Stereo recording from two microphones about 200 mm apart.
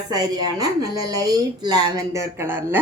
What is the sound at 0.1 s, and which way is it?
Speech, 20° right (ahead or behind).